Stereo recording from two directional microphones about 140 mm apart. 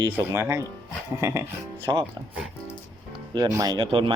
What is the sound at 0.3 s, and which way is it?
Speech, 15° right (ahead or behind).